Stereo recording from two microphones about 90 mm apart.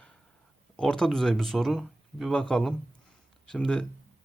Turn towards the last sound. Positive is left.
turn(degrees=10)  # may be behind; listen again after turning